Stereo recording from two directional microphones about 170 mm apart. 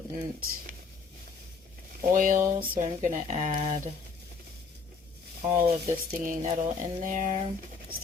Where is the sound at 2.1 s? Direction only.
50° right (ahead or behind).